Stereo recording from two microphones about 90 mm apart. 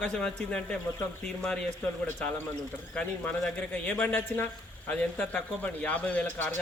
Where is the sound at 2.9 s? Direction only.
10° left (ahead or behind).